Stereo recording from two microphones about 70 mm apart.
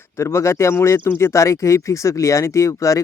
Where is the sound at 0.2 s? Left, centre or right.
Left.